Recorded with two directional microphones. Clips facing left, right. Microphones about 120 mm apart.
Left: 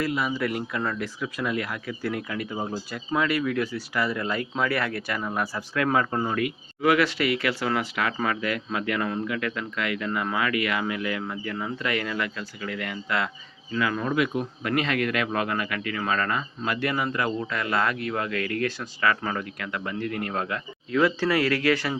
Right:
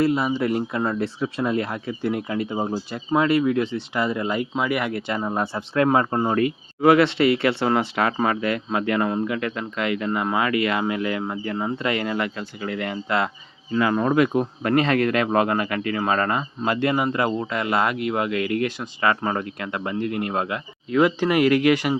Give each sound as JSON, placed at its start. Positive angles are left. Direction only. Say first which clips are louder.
{"t": 0.0, "sound": "speech", "louder": "right 6 dB", "side_deg": -25}